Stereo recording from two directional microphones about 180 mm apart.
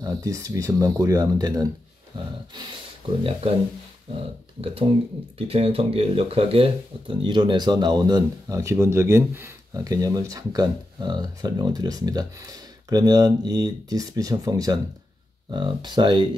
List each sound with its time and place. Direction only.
0.0 s speech: 20° right (ahead or behind); by 3.5 s 35° right (ahead or behind)
5.5 s speech: 30° right (ahead or behind)